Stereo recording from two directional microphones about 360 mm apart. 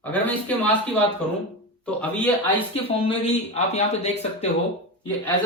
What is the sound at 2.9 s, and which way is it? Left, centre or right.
Speech, centre.